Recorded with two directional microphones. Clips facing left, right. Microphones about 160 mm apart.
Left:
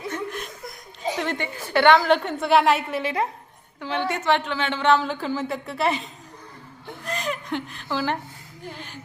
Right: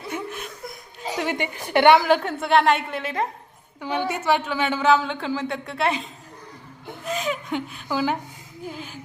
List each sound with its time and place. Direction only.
0.1 s chuckle: 5° right (ahead or behind)
1.1 s a woman's voice: 10° right (ahead or behind)
2.0 s a woman's voice: centre (ahead or behind)
3.8 s a woman's voice: 10° right (ahead or behind)
7.0 s a sound: 5° right (ahead or behind)
8.6 s a woman's voice: 5° right (ahead or behind)